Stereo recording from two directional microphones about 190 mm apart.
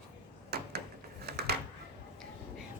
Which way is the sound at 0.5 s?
55° right (ahead or behind).